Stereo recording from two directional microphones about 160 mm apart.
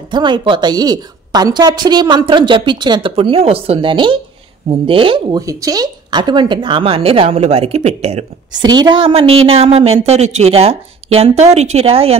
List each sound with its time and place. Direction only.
0.1 s a woman's voice: 30° right (ahead or behind)
5.4 s a woman's voice: 20° right (ahead or behind); by 8.3 s 40° right (ahead or behind)
8.5 s a woman's voice: 25° right (ahead or behind)